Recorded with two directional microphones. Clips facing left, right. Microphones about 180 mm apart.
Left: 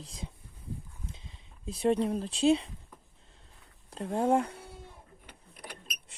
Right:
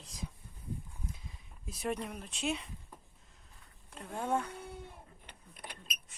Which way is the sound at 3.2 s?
30° left (ahead or behind).